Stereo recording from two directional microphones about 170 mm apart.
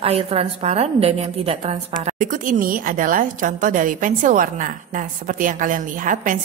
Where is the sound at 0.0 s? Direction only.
35° right (ahead or behind).